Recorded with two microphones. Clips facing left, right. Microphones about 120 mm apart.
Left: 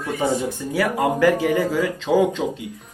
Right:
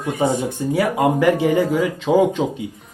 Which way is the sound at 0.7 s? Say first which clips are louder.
Right 2 dB; 20° right (ahead or behind).